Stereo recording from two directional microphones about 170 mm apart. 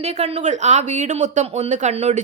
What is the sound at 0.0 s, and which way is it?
A woman's voice, 40° right (ahead or behind).